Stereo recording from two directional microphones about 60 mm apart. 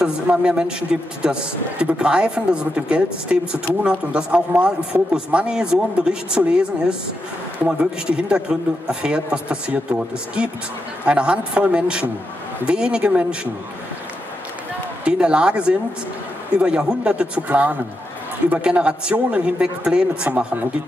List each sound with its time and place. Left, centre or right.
0.0 s a man's voice: centre
7.6 s a man's voice: centre
15.0 s a man's voice: centre
20.2 s a man's voice: right